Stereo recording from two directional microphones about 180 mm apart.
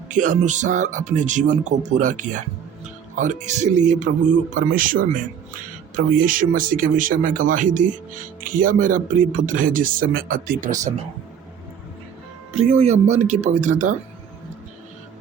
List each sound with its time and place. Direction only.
0.1 s speech: 45° right (ahead or behind)
3.4 s speech: 40° right (ahead or behind)
12.5 s speech: 35° right (ahead or behind)